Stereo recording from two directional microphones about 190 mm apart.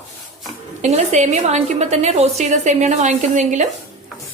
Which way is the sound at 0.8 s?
35° right (ahead or behind).